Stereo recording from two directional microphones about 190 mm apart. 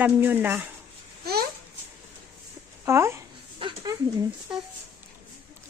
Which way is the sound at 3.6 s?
25° right (ahead or behind).